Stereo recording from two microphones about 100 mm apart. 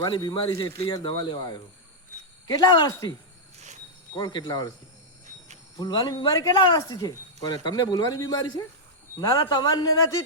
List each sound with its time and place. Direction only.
0.0 s speech: 45° left (ahead or behind)
4.1 s speech: 45° left (ahead or behind)
5.7 s speech: 40° left (ahead or behind)